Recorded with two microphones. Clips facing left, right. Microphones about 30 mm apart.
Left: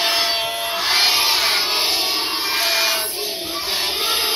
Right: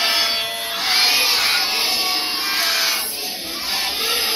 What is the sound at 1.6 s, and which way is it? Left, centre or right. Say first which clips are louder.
Music: left 1 dB; left.